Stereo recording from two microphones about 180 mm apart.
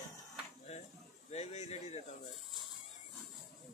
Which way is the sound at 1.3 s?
35° left (ahead or behind).